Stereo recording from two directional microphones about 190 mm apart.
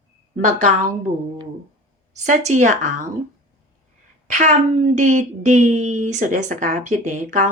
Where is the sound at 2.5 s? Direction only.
40° right (ahead or behind).